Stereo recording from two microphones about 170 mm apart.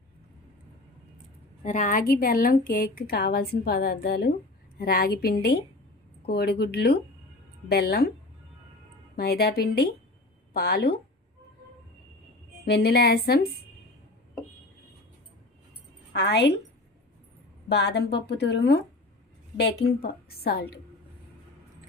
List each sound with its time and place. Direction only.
1.6 s a woman's voice: 45° left (ahead or behind); by 8.1 s 65° left (ahead or behind)
9.1 s a woman's voice: 70° left (ahead or behind)
12.6 s a woman's voice: 70° left (ahead or behind)
16.1 s a woman's voice: 85° left
17.7 s a woman's voice: 90° left; by 20.7 s 65° left (ahead or behind)